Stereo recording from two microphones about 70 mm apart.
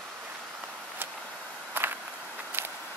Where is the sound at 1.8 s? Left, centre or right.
Right.